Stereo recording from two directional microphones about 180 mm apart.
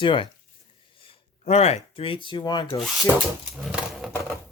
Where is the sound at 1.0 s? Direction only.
35° left (ahead or behind).